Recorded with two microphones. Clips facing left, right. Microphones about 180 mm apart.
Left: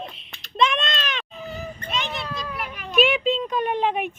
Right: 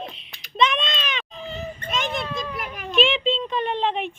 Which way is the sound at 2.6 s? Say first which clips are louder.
Right 1 dB; 45° right (ahead or behind).